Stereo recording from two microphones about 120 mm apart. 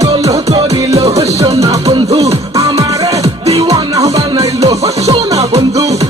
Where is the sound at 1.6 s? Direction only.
40° right (ahead or behind).